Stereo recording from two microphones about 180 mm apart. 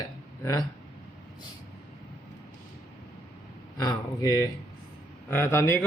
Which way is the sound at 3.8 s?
20° left (ahead or behind).